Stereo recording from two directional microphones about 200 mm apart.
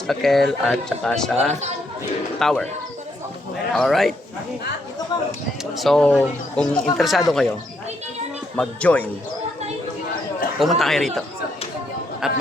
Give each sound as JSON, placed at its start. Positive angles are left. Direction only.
{"t": 0.1, "sound": "speech", "side_deg": 0}
{"t": 3.8, "sound": "speech", "side_deg": 0}
{"t": 5.1, "sound": "speech", "side_deg": 20}
{"t": 5.7, "sound": "speech", "side_deg": 0}
{"t": 8.5, "sound": "speech", "side_deg": 5}
{"t": 10.6, "sound": "speech", "side_deg": 0}
{"t": 12.2, "sound": "speech", "side_deg": -5}